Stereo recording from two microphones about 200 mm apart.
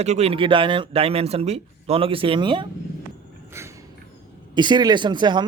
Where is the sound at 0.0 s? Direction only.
30° right (ahead or behind).